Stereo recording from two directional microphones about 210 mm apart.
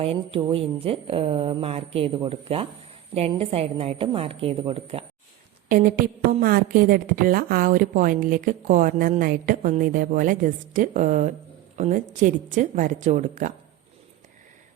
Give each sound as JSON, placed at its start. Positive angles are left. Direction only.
{"t": 0.0, "sound": "speech", "side_deg": -25}
{"t": 5.6, "sound": "a woman's voice", "side_deg": -40}